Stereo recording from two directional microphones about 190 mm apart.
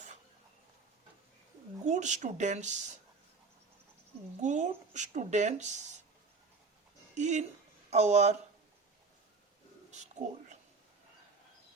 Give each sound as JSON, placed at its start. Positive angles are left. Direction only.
{"t": 1.8, "sound": "speech", "side_deg": -40}
{"t": 4.4, "sound": "speech", "side_deg": -40}
{"t": 7.2, "sound": "speech", "side_deg": -40}
{"t": 9.9, "sound": "a sound", "side_deg": -40}